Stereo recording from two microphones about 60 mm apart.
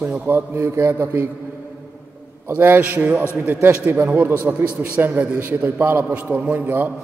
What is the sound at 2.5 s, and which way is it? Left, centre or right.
A man's voice, right.